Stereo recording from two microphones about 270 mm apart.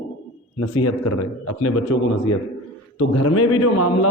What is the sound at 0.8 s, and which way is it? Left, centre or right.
Speech, left.